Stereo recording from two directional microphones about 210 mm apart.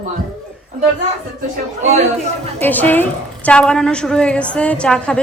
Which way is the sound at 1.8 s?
30° right (ahead or behind).